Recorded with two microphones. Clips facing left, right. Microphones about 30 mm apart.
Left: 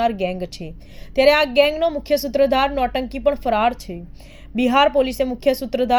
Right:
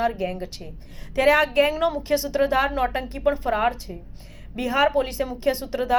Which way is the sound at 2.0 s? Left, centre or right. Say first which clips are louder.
Left 5 dB; left.